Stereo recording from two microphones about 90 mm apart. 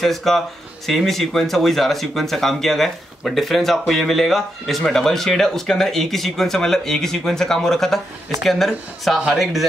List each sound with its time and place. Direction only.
0.0 s speech: centre (ahead or behind)